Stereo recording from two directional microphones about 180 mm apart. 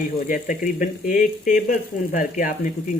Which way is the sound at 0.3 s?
45° left (ahead or behind).